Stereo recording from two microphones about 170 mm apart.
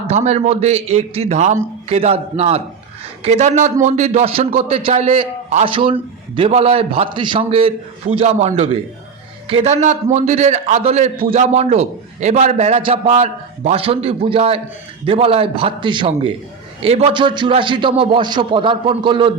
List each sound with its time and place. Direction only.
0.1 s a man's voice: 40° right (ahead or behind)